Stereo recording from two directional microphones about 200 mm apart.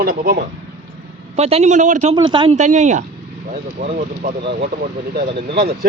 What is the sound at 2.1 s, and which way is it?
Speech, 25° right (ahead or behind).